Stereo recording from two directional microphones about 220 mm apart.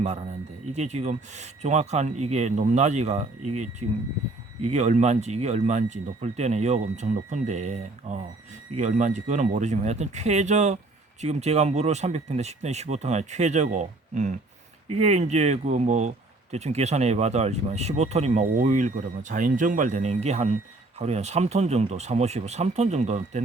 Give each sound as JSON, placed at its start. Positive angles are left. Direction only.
{"t": 0.7, "sound": "speech", "side_deg": -30}